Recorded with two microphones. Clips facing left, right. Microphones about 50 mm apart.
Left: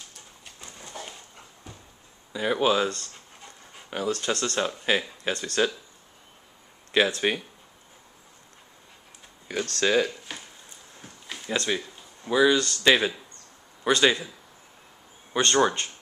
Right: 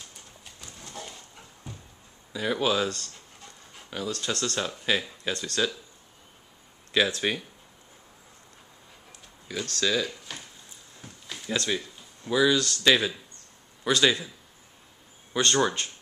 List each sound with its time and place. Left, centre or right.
0.6 s horse: centre
2.3 s speech: centre
6.9 s speech: centre
9.5 s speech: left
11.0 s a sound: centre
12.3 s speech: centre
15.3 s speech: centre